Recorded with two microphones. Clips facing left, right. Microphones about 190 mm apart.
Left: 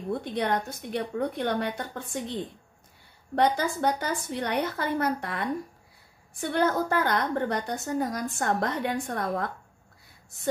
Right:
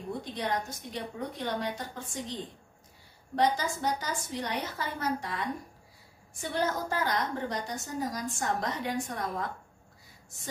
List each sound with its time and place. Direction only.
0.2 s a woman's voice: 60° left (ahead or behind)
3.3 s a woman's voice: 60° left (ahead or behind)